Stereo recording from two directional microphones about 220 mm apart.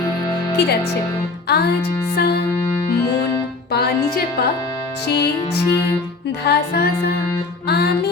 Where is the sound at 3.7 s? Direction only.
45° left (ahead or behind).